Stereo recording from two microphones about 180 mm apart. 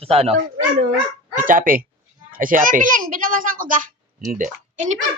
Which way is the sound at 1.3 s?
50° right (ahead or behind).